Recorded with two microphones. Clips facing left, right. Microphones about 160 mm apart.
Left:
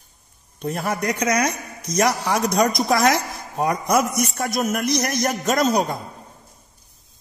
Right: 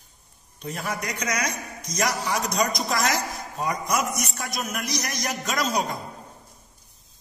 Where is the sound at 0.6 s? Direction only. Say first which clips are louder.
Left 6 dB; 55° left (ahead or behind).